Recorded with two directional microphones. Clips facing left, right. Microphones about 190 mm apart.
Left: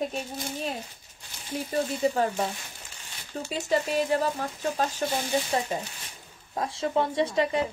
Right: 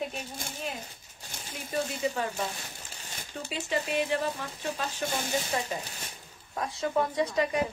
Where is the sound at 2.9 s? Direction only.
40° right (ahead or behind).